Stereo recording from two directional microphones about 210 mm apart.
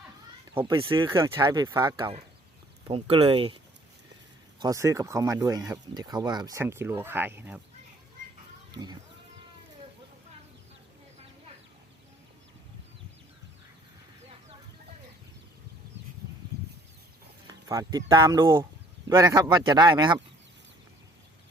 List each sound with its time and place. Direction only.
0.5 s speech: 25° right (ahead or behind)
4.6 s speech: 15° right (ahead or behind)
8.7 s speech: 20° right (ahead or behind)
17.5 s speech: 15° right (ahead or behind)